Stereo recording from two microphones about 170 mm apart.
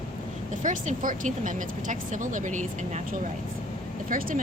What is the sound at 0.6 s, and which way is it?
Speech, 45° right (ahead or behind).